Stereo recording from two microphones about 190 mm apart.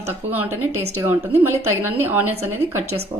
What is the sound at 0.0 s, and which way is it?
Speech, 10° right (ahead or behind).